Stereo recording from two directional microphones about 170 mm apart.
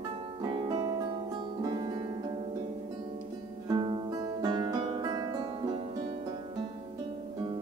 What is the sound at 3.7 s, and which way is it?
Music, 30° right (ahead or behind).